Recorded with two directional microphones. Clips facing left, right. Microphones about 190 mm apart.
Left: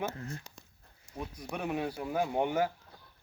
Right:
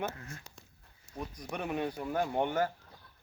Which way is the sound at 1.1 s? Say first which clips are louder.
Even; 5° left (ahead or behind).